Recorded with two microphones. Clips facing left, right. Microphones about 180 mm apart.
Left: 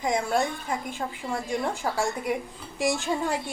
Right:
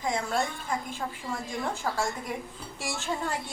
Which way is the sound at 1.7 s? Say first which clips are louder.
Left 3 dB; 15° left (ahead or behind).